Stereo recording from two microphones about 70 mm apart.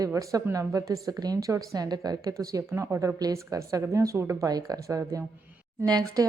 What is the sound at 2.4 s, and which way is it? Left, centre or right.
Speech, right.